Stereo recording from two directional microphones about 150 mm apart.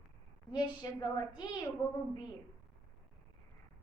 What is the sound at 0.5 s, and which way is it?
Speech, 25° left (ahead or behind).